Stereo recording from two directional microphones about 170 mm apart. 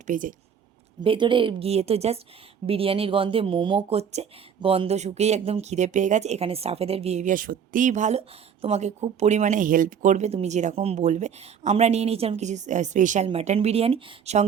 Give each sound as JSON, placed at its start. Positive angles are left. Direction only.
{"t": 0.1, "sound": "speech", "side_deg": -50}
{"t": 1.0, "sound": "speech", "side_deg": -30}